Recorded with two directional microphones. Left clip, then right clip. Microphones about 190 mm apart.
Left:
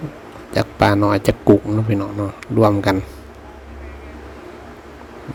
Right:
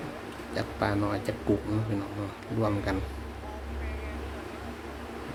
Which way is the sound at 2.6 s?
45° left (ahead or behind).